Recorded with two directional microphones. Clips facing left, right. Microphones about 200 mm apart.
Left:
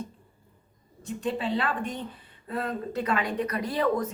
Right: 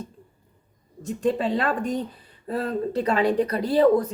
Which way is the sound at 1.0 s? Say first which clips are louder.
Right 6 dB; 45° right (ahead or behind).